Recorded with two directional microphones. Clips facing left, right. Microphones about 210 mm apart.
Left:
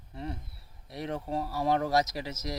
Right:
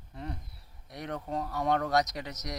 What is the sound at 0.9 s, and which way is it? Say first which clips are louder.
Speech: left 2 dB; 25° left (ahead or behind).